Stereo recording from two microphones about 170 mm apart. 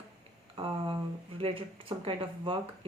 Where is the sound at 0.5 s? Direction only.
30° right (ahead or behind).